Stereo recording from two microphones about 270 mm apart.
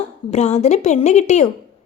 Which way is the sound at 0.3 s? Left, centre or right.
Left.